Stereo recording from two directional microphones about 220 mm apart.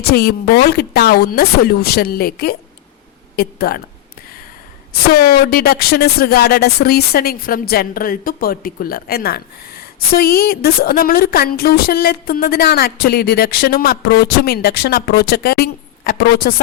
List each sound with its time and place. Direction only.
0.1 s speech: 45° left (ahead or behind)
5.1 s speech: 40° left (ahead or behind)